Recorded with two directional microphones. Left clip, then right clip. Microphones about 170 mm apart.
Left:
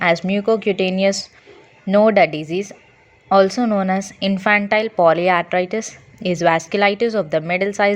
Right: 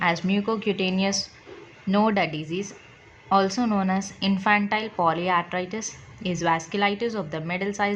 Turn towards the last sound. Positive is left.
turn(degrees=50)  # may be behind; listen again after turning